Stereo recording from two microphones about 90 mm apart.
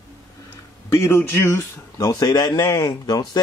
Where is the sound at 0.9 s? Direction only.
30° left (ahead or behind).